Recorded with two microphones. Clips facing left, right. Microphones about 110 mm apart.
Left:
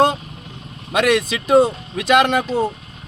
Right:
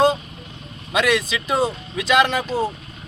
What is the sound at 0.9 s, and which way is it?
A man's voice, 55° left (ahead or behind).